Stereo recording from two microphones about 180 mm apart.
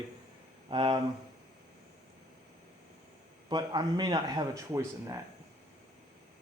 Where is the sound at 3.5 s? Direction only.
25° right (ahead or behind).